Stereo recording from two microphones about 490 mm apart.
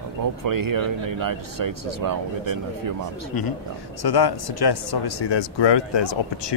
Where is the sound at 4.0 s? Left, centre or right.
Left.